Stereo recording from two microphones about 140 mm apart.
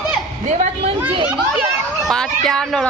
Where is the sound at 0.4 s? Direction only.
55° right (ahead or behind).